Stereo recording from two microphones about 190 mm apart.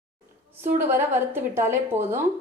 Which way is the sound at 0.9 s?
10° right (ahead or behind).